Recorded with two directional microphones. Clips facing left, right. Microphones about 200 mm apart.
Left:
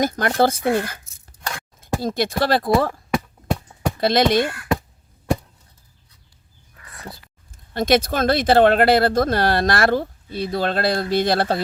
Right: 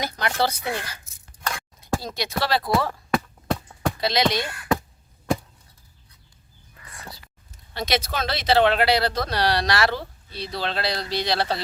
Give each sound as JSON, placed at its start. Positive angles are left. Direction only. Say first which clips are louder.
{"t": 0.0, "sound": "speech", "louder": "left 7 dB", "side_deg": 45}
{"t": 3.2, "sound": "a sound", "louder": "left 2 dB", "side_deg": 10}
{"t": 3.9, "sound": "speech", "louder": "left 7 dB", "side_deg": 50}
{"t": 7.1, "sound": "speech", "louder": "left 3 dB", "side_deg": 50}